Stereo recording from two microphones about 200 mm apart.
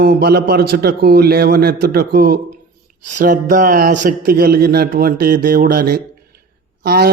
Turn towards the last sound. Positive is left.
turn(degrees=-50)  # may be behind; listen again after turning